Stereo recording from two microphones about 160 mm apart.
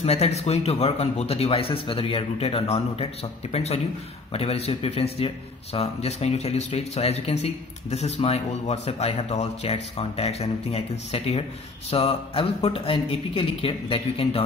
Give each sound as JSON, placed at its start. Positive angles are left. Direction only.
{"t": 0.0, "sound": "a man's voice", "side_deg": 40}